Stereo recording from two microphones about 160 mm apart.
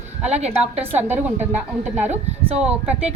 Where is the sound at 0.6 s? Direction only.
10° right (ahead or behind).